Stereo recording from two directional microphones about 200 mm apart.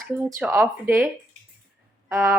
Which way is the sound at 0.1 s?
15° right (ahead or behind).